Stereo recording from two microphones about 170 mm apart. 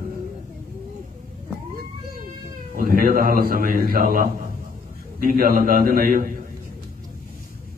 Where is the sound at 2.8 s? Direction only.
55° right (ahead or behind).